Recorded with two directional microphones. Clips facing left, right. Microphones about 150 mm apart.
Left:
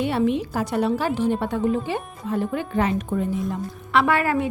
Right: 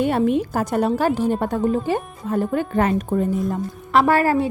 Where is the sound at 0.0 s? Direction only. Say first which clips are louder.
Right 3 dB; 45° right (ahead or behind).